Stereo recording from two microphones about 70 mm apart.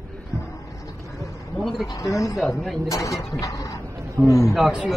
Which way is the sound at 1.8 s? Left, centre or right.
Left.